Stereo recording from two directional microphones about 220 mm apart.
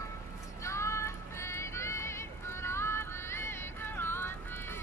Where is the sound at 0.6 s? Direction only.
10° left (ahead or behind).